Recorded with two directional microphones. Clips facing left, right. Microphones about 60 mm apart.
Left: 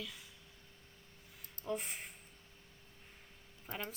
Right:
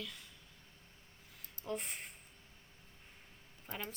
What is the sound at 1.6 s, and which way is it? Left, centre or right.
Speech, centre.